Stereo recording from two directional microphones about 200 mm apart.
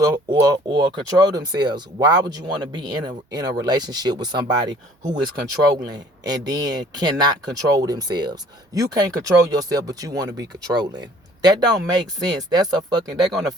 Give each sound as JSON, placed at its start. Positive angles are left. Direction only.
{"t": 0.0, "sound": "speech", "side_deg": -20}